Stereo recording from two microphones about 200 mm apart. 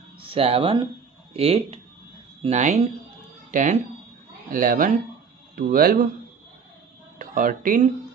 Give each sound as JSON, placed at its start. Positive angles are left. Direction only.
{"t": 0.2, "sound": "speech", "side_deg": -30}
{"t": 4.5, "sound": "speech", "side_deg": -45}
{"t": 7.2, "sound": "speech", "side_deg": -45}